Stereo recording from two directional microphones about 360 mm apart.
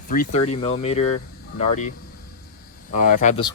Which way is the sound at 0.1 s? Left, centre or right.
Centre.